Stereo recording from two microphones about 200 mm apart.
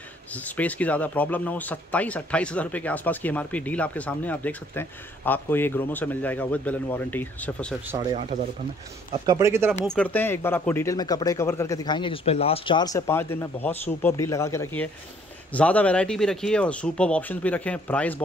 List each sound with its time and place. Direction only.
0.3 s speech: 10° left (ahead or behind)
8.1 s speech: 35° right (ahead or behind)
9.2 s speech: 15° right (ahead or behind)
9.9 s speech: 10° left (ahead or behind)